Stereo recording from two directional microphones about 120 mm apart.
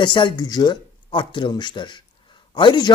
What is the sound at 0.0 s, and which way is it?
Speech, 40° left (ahead or behind).